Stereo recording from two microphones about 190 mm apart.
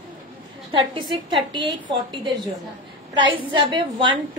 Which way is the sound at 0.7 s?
25° right (ahead or behind).